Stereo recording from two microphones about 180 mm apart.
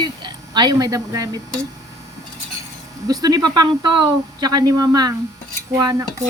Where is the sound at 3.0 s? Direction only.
20° right (ahead or behind).